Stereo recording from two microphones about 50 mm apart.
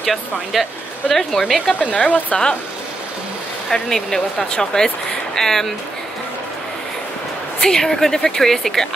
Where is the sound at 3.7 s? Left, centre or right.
Centre.